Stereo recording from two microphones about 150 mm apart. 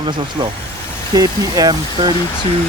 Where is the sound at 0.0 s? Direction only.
30° right (ahead or behind).